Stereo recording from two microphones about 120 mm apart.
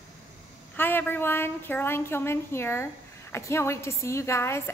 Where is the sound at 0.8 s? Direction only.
15° left (ahead or behind).